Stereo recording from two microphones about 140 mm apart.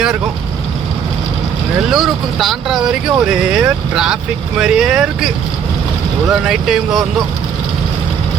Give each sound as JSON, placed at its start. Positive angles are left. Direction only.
{"t": 1.9, "sound": "speech", "side_deg": 0}